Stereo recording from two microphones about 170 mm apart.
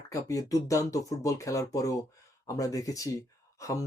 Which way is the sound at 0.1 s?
20° left (ahead or behind).